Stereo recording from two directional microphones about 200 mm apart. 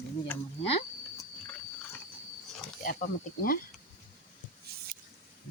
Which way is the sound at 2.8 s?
45° left (ahead or behind).